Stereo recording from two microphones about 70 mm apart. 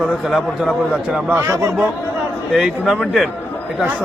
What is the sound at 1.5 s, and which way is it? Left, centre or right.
Speech, right.